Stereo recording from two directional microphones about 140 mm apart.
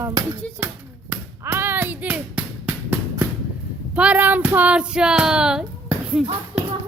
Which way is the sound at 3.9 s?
10° right (ahead or behind).